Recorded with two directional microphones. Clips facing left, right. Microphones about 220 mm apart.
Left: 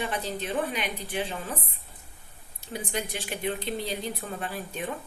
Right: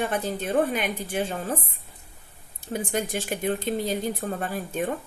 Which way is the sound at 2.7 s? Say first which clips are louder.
Right 5 dB; 45° right (ahead or behind).